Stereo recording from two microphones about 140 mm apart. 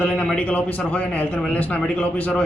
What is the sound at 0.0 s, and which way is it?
A man's voice, 10° left (ahead or behind).